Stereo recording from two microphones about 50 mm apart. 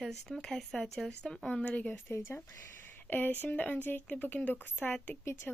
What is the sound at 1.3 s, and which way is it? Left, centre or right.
Speech, centre.